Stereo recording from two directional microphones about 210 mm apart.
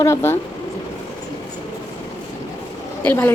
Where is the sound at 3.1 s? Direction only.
10° left (ahead or behind).